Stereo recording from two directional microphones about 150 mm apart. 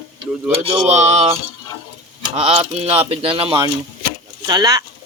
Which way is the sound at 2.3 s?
40° right (ahead or behind).